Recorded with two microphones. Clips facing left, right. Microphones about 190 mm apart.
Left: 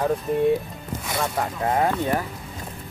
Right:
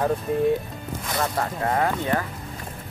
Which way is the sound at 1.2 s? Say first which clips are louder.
Even; 15° left (ahead or behind).